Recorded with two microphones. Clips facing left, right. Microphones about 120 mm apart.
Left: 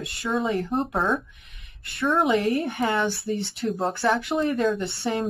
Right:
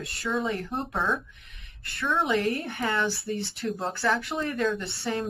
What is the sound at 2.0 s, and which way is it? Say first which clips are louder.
Speech: left 4 dB; 25° left (ahead or behind).